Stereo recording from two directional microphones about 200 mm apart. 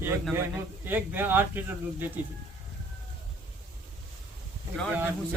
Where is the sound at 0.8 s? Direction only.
10° right (ahead or behind).